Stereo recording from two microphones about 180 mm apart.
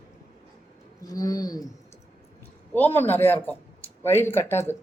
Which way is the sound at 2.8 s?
10° left (ahead or behind).